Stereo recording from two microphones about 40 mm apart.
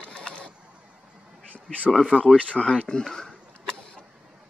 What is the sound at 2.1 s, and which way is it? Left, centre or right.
Speech, left.